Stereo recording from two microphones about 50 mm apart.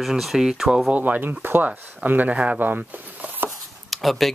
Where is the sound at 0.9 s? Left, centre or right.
Right.